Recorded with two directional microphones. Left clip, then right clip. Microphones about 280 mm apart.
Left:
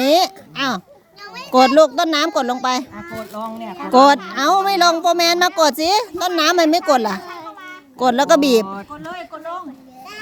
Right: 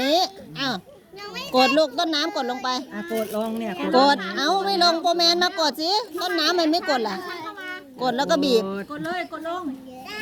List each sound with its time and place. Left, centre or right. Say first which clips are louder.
0.0 s a sound: left 6 dB; left
1.5 s speech: left 7 dB; left
2.9 s speech: right 3 dB; centre
3.9 s speech: left 7 dB; left
9.0 s speech: right 2 dB; centre